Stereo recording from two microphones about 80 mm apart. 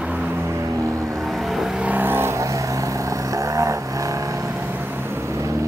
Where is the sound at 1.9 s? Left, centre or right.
Right.